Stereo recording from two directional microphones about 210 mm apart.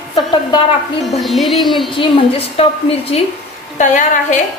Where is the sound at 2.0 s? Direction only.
25° left (ahead or behind).